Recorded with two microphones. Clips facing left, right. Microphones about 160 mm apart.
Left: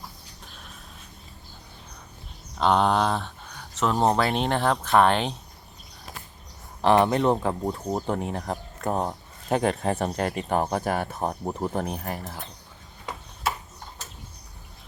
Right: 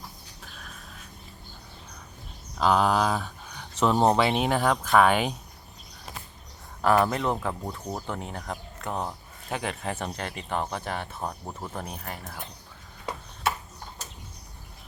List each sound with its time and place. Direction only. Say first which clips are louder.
0.4 s a sound: right 1 dB; centre (ahead or behind)
2.6 s speech: left 1 dB; 5° right (ahead or behind)
6.8 s speech: left 3 dB; 25° left (ahead or behind)